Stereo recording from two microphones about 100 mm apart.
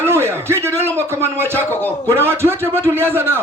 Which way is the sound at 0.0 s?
25° right (ahead or behind).